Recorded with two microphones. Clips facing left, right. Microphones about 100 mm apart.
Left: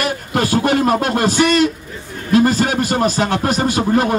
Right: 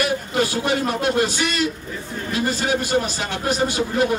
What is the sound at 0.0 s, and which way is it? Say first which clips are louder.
A man's voice: left 2 dB; 55° left (ahead or behind).